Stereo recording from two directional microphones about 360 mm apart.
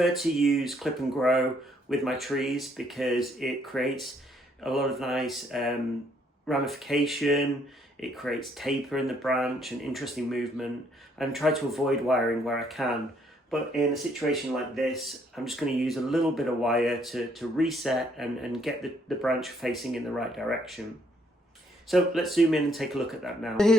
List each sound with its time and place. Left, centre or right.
0.0 s speech: centre
21.8 s speech: centre